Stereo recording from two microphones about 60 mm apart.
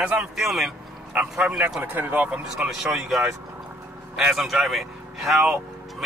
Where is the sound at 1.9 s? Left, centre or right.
Right.